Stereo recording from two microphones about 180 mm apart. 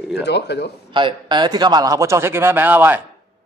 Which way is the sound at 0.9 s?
25° right (ahead or behind).